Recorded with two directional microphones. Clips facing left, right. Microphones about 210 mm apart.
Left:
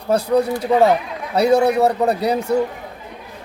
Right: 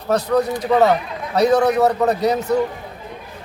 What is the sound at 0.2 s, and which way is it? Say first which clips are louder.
Speech: left 1 dB; 10° left (ahead or behind).